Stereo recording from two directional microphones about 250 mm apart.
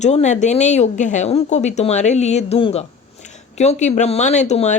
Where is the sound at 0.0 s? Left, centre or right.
Left.